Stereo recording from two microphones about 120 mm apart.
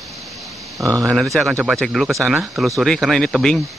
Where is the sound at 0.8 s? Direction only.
25° right (ahead or behind).